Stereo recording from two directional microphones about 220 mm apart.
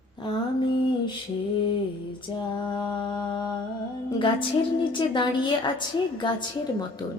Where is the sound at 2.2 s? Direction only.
20° left (ahead or behind).